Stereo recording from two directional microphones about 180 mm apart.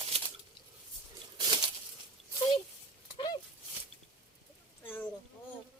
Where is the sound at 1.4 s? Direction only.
25° right (ahead or behind).